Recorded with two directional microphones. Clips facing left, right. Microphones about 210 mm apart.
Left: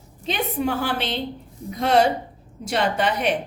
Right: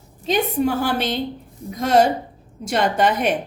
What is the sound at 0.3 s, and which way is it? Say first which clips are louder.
A woman's voice: right 5 dB; 40° right (ahead or behind).